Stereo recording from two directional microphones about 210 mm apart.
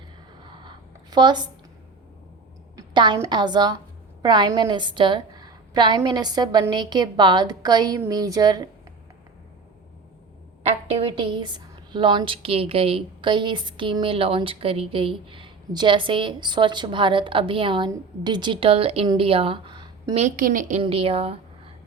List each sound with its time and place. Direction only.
0.4 s a sound: 20° right (ahead or behind)
2.7 s a woman's voice: 20° right (ahead or behind)
10.6 s a woman's voice: 25° right (ahead or behind)
20.2 s a woman's voice: 40° right (ahead or behind)
20.8 s a woman's voice: 25° right (ahead or behind)